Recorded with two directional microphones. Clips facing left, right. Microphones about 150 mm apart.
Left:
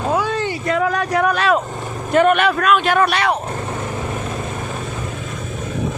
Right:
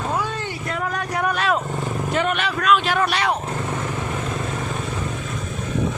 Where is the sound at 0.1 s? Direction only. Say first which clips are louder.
Left 6 dB; 90° left.